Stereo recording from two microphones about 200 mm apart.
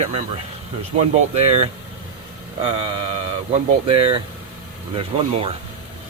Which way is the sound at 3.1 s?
30° right (ahead or behind).